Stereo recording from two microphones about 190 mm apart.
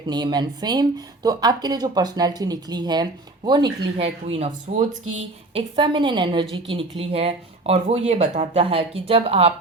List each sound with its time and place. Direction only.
0.1 s speech: 20° right (ahead or behind)